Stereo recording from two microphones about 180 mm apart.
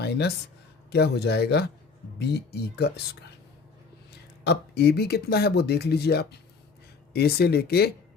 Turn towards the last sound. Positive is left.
turn(degrees=60)  # may be behind; listen again after turning